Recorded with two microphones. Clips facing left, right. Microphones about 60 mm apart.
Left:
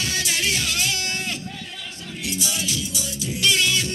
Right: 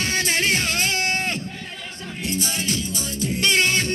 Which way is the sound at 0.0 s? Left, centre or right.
Right.